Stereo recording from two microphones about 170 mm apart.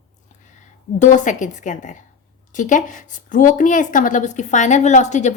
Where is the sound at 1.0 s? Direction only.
45° left (ahead or behind).